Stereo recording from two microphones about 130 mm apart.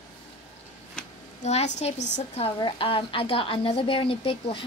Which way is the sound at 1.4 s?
60° left (ahead or behind).